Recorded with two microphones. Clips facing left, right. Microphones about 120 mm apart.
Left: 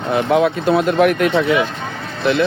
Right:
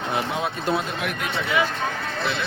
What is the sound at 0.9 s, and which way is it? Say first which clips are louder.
Speech: left 14 dB; 60° left (ahead or behind).